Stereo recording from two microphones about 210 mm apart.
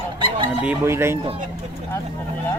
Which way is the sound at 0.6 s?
10° right (ahead or behind).